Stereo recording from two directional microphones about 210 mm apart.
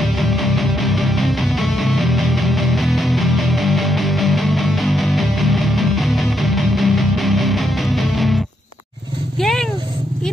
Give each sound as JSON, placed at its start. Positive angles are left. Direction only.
{"t": 0.0, "sound": "music", "side_deg": 0}
{"t": 9.4, "sound": "cat", "side_deg": 0}